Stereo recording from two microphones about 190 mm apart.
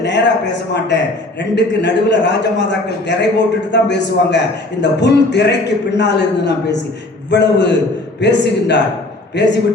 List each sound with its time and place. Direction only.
0.0 s a man's voice: 65° left (ahead or behind)